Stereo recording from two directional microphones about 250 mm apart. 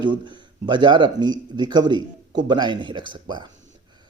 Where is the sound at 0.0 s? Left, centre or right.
Centre.